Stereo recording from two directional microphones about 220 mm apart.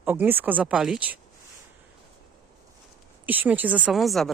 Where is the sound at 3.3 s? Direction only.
10° right (ahead or behind).